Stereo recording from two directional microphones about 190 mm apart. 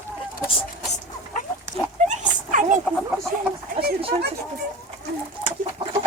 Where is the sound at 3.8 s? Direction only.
55° right (ahead or behind).